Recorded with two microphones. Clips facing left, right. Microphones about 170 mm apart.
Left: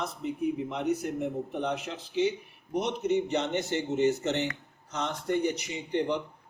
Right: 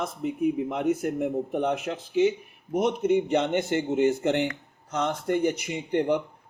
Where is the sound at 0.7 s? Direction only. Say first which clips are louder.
Right 4 dB; 50° right (ahead or behind).